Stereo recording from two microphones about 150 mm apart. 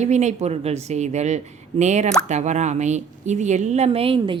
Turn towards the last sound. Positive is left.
turn(degrees=-40)  # may be behind; listen again after turning